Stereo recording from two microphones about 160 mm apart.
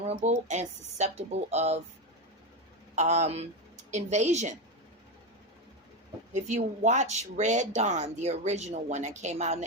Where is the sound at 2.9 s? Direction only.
45° right (ahead or behind).